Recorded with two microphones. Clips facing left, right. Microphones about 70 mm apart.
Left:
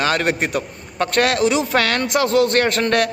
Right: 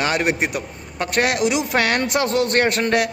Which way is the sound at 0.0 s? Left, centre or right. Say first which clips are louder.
Left 1 dB; centre.